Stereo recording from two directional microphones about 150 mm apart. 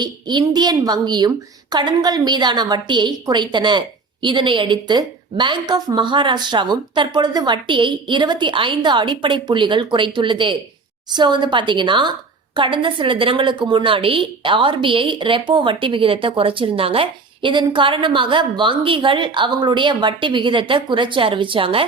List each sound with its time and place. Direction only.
0.0 s a woman's voice: 30° right (ahead or behind)